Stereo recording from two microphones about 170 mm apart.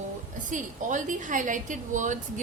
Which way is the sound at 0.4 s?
50° right (ahead or behind).